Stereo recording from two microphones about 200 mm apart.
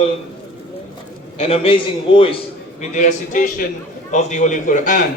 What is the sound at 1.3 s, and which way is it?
A man's voice, 30° left (ahead or behind).